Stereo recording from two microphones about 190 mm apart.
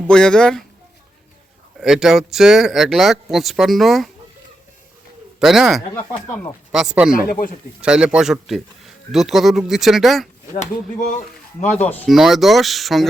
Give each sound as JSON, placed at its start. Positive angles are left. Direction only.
{"t": 0.1, "sound": "speech", "side_deg": 5}
{"t": 1.8, "sound": "speech", "side_deg": -5}
{"t": 5.4, "sound": "speech", "side_deg": 0}
{"t": 6.2, "sound": "speech", "side_deg": 10}
{"t": 6.7, "sound": "speech", "side_deg": -5}
{"t": 7.1, "sound": "speech", "side_deg": 50}
{"t": 7.8, "sound": "speech", "side_deg": -5}
{"t": 10.5, "sound": "speech", "side_deg": 40}
{"t": 11.6, "sound": "speech", "side_deg": 10}